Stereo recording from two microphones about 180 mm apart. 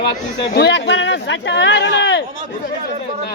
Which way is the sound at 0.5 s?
70° left (ahead or behind).